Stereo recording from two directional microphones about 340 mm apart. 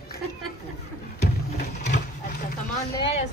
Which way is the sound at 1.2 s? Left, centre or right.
Left.